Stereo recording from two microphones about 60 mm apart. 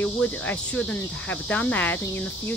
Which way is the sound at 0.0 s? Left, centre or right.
Left.